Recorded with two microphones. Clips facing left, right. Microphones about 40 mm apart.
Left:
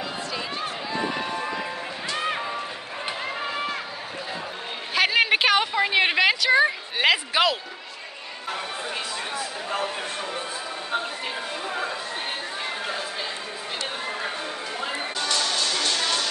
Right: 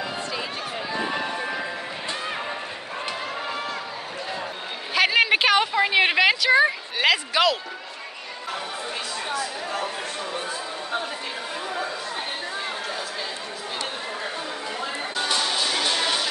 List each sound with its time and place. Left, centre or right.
1.2 s music: right
4.9 s a sound: centre
7.1 s a man's voice: centre
9.3 s speech: left
11.6 s speech: left
15.1 s music: centre